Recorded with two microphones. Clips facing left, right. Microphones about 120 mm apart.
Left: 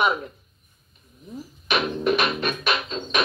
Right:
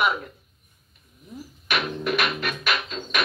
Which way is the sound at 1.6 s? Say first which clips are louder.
Left 4 dB; 25° left (ahead or behind).